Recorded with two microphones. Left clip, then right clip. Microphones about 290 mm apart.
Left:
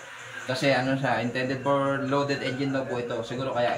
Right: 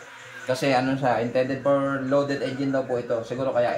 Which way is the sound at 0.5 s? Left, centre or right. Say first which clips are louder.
Right 1 dB; centre.